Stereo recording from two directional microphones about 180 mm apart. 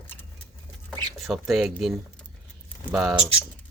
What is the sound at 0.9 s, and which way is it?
Speech, centre (ahead or behind).